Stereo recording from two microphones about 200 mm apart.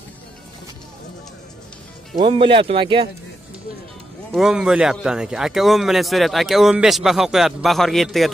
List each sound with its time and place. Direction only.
2.1 s speech: 25° right (ahead or behind)
4.3 s a man's voice: centre (ahead or behind)